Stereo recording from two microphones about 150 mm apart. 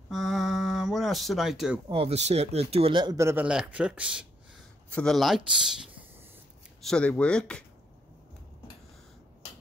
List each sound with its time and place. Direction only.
0.1 s a sound: centre (ahead or behind)
1.9 s speech: 40° right (ahead or behind)
3.2 s speech: 15° right (ahead or behind)
3.4 s speech: 5° right (ahead or behind)
4.8 s speech: 5° left (ahead or behind)
6.9 s speech: 5° left (ahead or behind)